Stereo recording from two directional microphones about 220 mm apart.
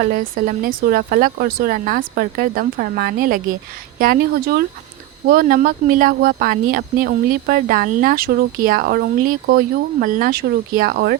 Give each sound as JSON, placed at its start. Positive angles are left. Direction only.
{"t": 0.0, "sound": "speech", "side_deg": -40}